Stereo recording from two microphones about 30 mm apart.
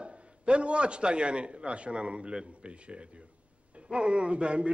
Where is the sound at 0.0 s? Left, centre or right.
Right.